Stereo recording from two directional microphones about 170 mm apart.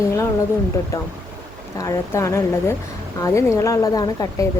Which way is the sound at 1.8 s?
15° left (ahead or behind).